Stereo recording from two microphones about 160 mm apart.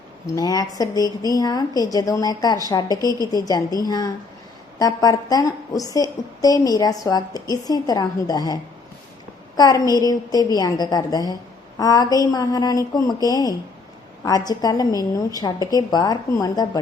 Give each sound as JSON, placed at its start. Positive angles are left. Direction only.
{"t": 0.3, "sound": "a woman's voice", "side_deg": 25}
{"t": 9.6, "sound": "a woman's voice", "side_deg": 25}